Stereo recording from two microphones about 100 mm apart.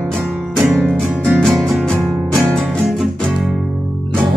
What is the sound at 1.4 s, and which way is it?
Music, centre (ahead or behind).